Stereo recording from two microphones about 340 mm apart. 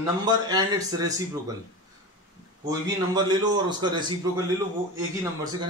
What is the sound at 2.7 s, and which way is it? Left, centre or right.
Speech, centre.